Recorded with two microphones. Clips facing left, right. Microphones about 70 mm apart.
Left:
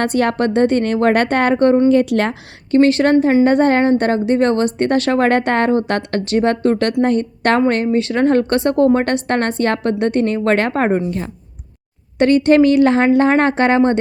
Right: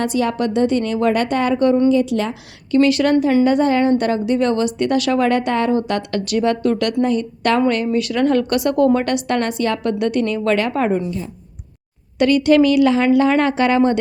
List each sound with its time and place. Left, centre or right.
0.0 s a woman's voice: left
2.7 s a woman's voice: left
7.9 s a woman's voice: left
12.2 s a woman's voice: left